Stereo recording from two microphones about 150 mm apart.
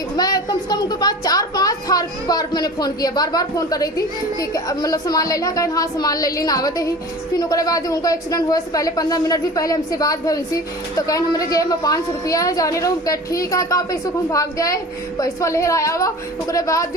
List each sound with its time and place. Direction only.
0.2 s a woman's voice: 25° left (ahead or behind)